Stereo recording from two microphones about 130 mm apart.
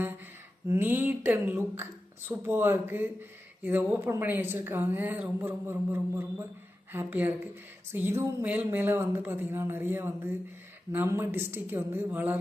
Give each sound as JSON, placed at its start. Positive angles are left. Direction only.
{"t": 0.7, "sound": "a woman's voice", "side_deg": -15}